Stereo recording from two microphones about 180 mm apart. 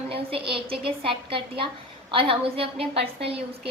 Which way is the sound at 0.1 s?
30° right (ahead or behind).